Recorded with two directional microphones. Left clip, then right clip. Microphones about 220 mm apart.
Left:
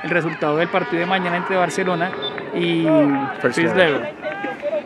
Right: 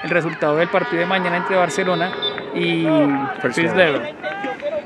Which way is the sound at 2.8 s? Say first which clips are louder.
Left 1 dB; 50° right (ahead or behind).